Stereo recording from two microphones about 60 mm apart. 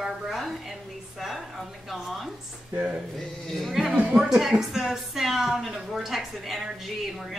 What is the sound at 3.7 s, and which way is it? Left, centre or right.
A woman's voice, centre.